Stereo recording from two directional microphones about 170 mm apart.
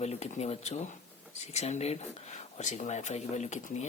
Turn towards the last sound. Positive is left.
turn(degrees=45)  # may be behind; listen again after turning